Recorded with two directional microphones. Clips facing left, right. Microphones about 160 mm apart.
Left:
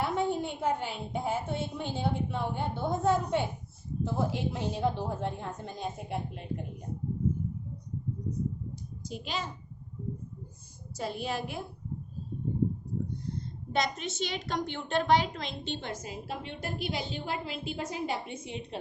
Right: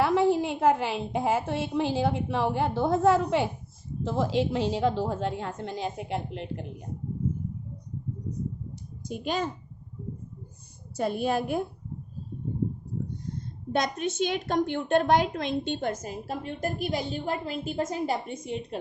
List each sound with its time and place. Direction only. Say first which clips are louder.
0.0 s a woman's voice: right 7 dB; 90° right
9.0 s a woman's voice: right 7 dB; 50° right (ahead or behind)
10.9 s a woman's voice: right 7 dB; 55° right (ahead or behind)
13.7 s a woman's voice: right 4 dB; 55° right (ahead or behind)